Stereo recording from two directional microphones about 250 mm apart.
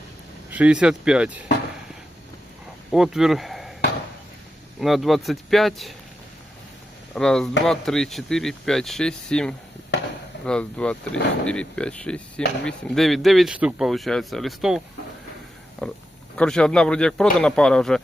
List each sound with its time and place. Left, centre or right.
0.5 s speech: centre
2.9 s speech: centre
4.8 s speech: centre
7.1 s speech: centre
9.9 s chop: left
10.4 s speech: centre
15.8 s speech: centre